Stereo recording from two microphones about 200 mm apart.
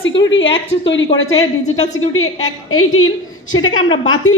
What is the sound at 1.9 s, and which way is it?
A woman's voice, 90° left.